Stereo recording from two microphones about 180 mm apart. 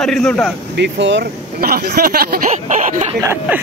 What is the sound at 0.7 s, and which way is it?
Speech, 75° right (ahead or behind).